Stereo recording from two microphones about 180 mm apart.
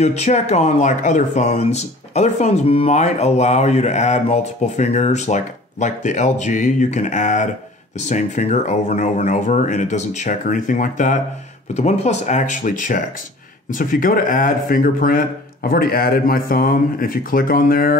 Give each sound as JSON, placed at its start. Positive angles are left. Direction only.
{"t": 0.0, "sound": "speech", "side_deg": 40}